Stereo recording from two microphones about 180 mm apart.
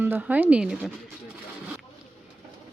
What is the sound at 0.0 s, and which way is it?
Speech, 10° right (ahead or behind).